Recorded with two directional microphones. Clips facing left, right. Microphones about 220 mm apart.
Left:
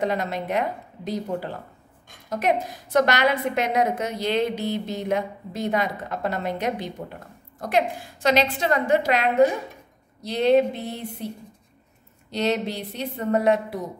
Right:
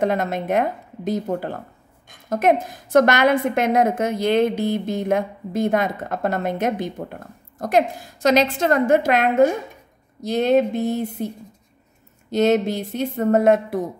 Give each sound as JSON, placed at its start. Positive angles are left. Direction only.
{"t": 0.0, "sound": "a woman's voice", "side_deg": -50}